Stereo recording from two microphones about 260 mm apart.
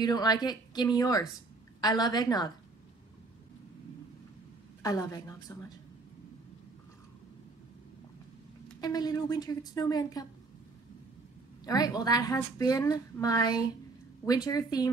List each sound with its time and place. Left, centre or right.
0.0 s a woman's voice: centre
4.8 s a woman's voice: centre
8.8 s a woman's voice: centre
11.6 s a woman's voice: centre